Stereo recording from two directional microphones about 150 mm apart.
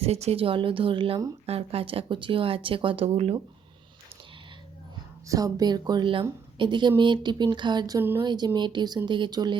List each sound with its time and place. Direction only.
0.0 s speech: 45° right (ahead or behind)
5.3 s speech: 25° right (ahead or behind)